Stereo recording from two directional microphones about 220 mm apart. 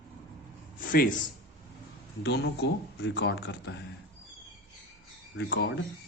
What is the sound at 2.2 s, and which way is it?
A man's voice, 50° left (ahead or behind).